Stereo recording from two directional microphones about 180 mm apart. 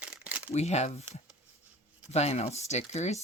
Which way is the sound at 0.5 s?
40° left (ahead or behind).